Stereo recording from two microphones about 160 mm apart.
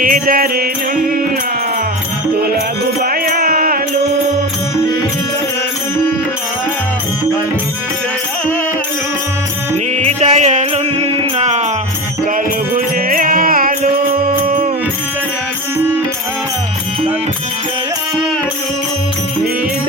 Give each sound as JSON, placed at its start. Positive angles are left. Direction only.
{"t": 0.0, "sound": "music", "side_deg": -60}
{"t": 3.0, "sound": "music", "side_deg": -65}
{"t": 10.0, "sound": "music", "side_deg": -40}
{"t": 12.7, "sound": "music", "side_deg": -60}